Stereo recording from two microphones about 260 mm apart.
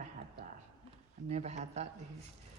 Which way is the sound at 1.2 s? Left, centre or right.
Right.